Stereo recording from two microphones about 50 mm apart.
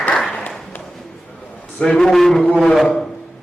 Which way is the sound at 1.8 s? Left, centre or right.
Centre.